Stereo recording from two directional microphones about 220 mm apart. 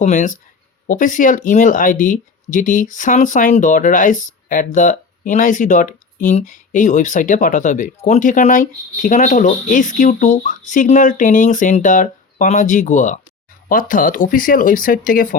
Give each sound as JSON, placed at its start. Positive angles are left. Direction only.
{"t": 0.0, "sound": "speech", "side_deg": 35}